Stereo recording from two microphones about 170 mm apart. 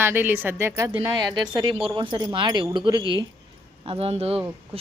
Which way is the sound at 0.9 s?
25° right (ahead or behind).